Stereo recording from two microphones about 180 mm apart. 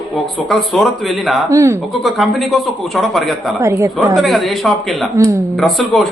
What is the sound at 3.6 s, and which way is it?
Speech, 15° right (ahead or behind).